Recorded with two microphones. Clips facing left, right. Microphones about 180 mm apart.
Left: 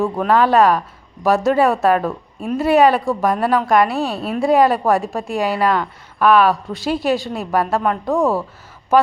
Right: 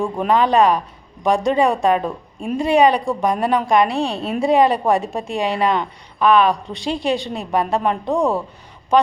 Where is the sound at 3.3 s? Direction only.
20° right (ahead or behind).